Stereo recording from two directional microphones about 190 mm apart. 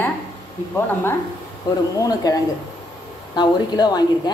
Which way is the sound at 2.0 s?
20° left (ahead or behind).